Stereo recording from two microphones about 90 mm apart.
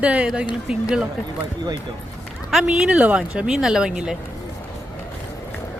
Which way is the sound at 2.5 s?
5° right (ahead or behind).